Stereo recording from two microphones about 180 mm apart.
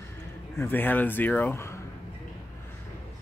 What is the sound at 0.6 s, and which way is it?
Speech, 10° left (ahead or behind).